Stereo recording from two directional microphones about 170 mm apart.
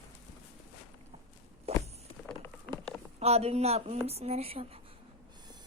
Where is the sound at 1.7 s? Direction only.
35° right (ahead or behind).